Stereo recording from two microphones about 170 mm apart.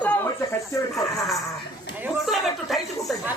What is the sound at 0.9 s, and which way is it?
Speech, centre (ahead or behind).